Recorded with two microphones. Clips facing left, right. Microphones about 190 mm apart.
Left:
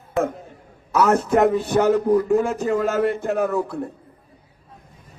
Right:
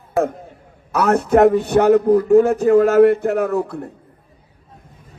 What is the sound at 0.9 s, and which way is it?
Speech, 60° right (ahead or behind).